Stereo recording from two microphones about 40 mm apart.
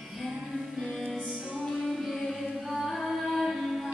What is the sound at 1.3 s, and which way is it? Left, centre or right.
Music, centre.